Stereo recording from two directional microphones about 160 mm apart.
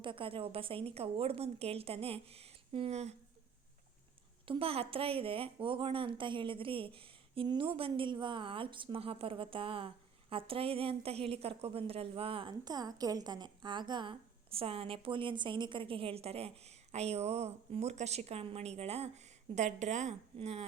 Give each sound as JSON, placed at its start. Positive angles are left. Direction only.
{"t": 0.0, "sound": "speech", "side_deg": -35}
{"t": 4.4, "sound": "speech", "side_deg": -35}